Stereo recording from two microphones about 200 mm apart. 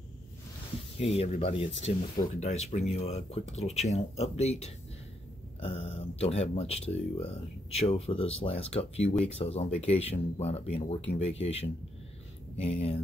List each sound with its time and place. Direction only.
0.9 s speech: 30° left (ahead or behind)